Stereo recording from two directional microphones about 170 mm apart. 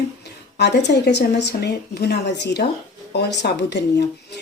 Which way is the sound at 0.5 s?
80° left.